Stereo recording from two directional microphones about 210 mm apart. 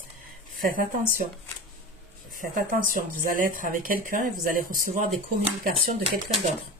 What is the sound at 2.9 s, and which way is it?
Speech, 40° right (ahead or behind).